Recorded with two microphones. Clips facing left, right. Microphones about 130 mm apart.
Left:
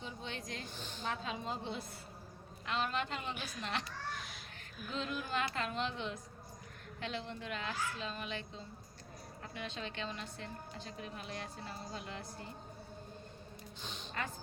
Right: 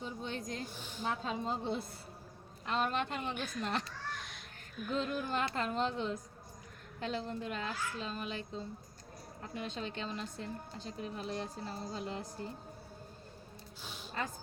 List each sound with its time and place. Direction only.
0.0 s speech: 40° right (ahead or behind)
0.6 s a woman's voice: 10° right (ahead or behind)
1.2 s a woman's voice: 40° right (ahead or behind)
3.3 s a woman's voice: 5° left (ahead or behind)
3.6 s speech: 45° right (ahead or behind)
4.1 s a sound: centre (ahead or behind)
5.0 s a woman's voice: 45° right (ahead or behind)
9.6 s a woman's voice: 40° right (ahead or behind)
13.8 s music: 10° right (ahead or behind)